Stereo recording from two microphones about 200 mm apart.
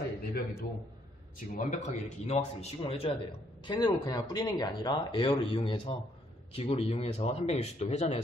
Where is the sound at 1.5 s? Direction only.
40° left (ahead or behind).